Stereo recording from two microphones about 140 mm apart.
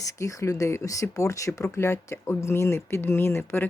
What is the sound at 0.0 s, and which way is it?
Speech, 20° left (ahead or behind).